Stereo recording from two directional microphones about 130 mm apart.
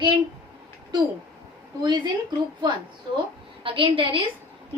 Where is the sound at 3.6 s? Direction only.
40° right (ahead or behind).